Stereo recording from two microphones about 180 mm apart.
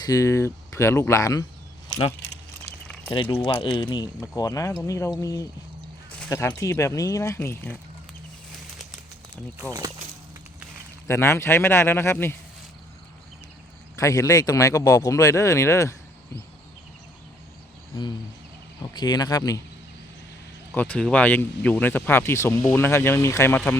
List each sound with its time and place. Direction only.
0.0 s speech: 20° left (ahead or behind)
3.3 s speech: 30° left (ahead or behind)
6.1 s speech: 5° left (ahead or behind)
9.6 s speech: 20° right (ahead or behind)
11.1 s speech: 15° left (ahead or behind)
14.0 s speech: 20° left (ahead or behind)
17.9 s speech: 20° left (ahead or behind)
20.7 s speech: 10° left (ahead or behind)